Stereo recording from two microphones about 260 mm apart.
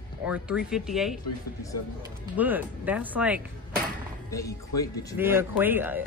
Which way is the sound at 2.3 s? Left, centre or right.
Centre.